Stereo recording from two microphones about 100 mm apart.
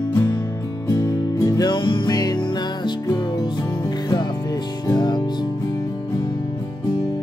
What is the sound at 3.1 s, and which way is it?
Music, 40° left (ahead or behind).